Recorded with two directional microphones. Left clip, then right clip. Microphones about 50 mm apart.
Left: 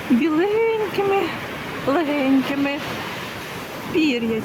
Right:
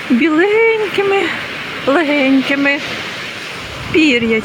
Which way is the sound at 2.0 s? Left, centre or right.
Right.